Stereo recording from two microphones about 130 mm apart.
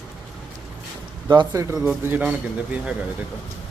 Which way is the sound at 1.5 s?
15° right (ahead or behind).